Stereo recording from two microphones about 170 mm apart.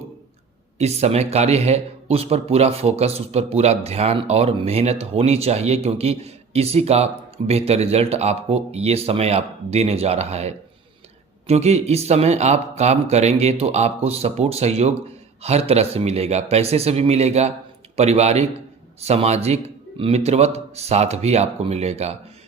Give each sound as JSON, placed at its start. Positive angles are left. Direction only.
{"t": 0.8, "sound": "speech", "side_deg": -40}